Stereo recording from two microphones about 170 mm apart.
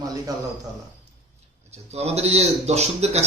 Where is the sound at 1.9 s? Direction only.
40° right (ahead or behind).